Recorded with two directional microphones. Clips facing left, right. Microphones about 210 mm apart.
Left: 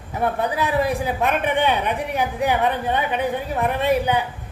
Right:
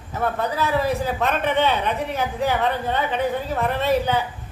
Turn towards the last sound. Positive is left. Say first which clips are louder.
# left 1 dB
turn(degrees=15)  # may be behind; listen again after turning